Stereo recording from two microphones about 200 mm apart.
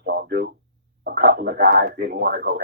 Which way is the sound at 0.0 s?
55° right (ahead or behind).